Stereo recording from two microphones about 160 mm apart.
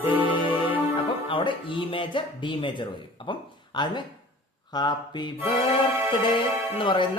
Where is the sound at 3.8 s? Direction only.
30° left (ahead or behind).